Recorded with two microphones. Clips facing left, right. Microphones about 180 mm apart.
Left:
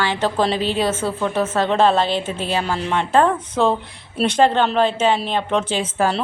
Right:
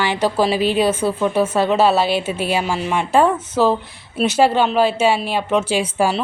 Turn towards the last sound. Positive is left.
turn(degrees=-10)  # may be behind; listen again after turning